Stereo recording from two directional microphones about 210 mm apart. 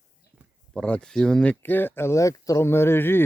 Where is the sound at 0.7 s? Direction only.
5° left (ahead or behind).